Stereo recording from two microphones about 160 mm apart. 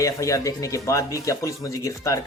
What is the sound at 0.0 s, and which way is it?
Speech, 20° left (ahead or behind).